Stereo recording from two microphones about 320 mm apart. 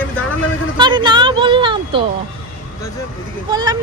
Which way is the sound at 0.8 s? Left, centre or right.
Centre.